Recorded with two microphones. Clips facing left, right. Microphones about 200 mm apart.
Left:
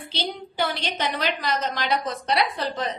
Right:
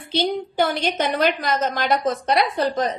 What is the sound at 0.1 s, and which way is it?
A woman's voice, 50° right (ahead or behind).